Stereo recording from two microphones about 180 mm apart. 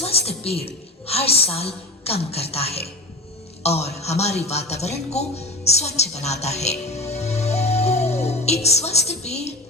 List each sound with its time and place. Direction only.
0.0 s a woman's voice: 35° left (ahead or behind)
5.1 s music: 35° left (ahead or behind)